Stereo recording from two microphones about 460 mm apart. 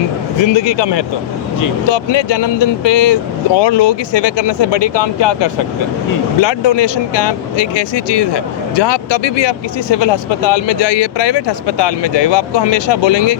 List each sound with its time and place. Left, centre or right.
0.4 s speech: left